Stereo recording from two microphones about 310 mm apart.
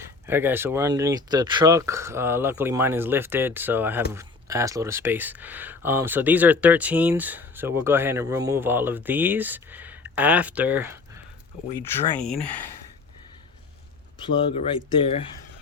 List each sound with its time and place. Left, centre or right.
0.3 s speech: centre
14.9 s speech: centre